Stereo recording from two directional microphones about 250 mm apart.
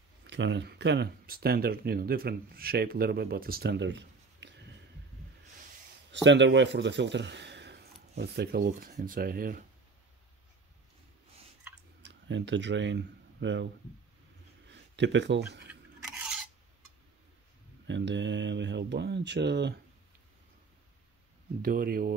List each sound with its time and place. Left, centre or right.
0.2 s speech: right
6.2 s speech: right
12.0 s speech: right
14.7 s speech: right
17.8 s speech: right
21.5 s speech: right